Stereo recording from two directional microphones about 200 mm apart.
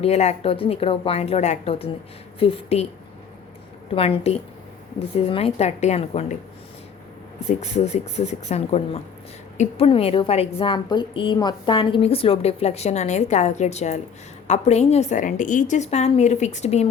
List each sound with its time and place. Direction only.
0.0 s a woman's voice: 35° left (ahead or behind)
3.9 s a woman's voice: 30° left (ahead or behind)
7.6 s a woman's voice: 35° left (ahead or behind)